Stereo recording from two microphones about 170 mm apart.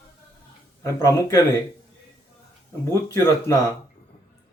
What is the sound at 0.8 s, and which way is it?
Speech, 20° left (ahead or behind).